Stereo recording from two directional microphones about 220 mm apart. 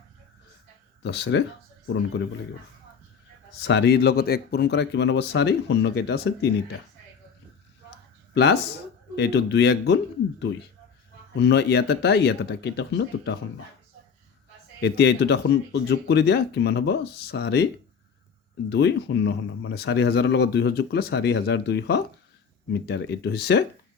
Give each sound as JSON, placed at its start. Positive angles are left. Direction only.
{"t": 1.0, "sound": "speech", "side_deg": 55}
{"t": 3.6, "sound": "speech", "side_deg": 50}
{"t": 8.3, "sound": "speech", "side_deg": 50}
{"t": 14.8, "sound": "speech", "side_deg": 50}
{"t": 18.7, "sound": "speech", "side_deg": 50}